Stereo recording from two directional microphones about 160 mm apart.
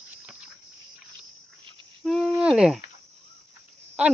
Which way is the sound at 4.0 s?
5° right (ahead or behind).